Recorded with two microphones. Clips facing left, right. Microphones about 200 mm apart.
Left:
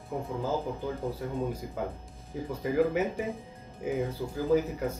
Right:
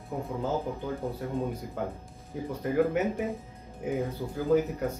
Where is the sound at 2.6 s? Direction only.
Centre (ahead or behind).